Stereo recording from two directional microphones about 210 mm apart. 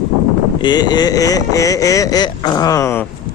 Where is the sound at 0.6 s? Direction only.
20° left (ahead or behind).